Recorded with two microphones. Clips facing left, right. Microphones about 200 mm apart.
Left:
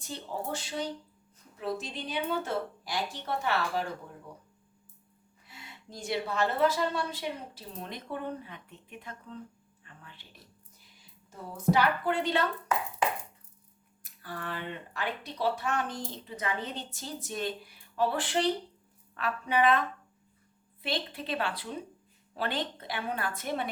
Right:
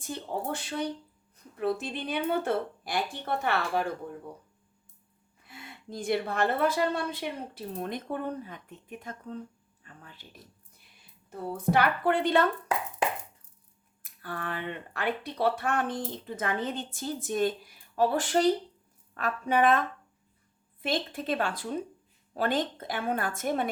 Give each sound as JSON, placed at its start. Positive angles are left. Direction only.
{"t": 0.0, "sound": "speech", "side_deg": -55}
{"t": 5.5, "sound": "a woman's voice", "side_deg": -55}
{"t": 9.8, "sound": "a sound", "side_deg": -40}
{"t": 11.7, "sound": "speech", "side_deg": -55}
{"t": 14.0, "sound": "a woman's voice", "side_deg": -55}
{"t": 20.8, "sound": "a woman's voice", "side_deg": -45}